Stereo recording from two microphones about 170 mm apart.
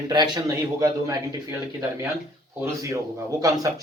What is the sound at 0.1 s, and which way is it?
A man's voice, 25° right (ahead or behind).